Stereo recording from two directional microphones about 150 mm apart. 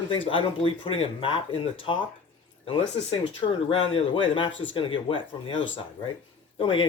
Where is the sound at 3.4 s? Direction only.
35° left (ahead or behind).